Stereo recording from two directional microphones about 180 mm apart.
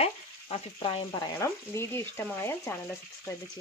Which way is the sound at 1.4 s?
15° left (ahead or behind).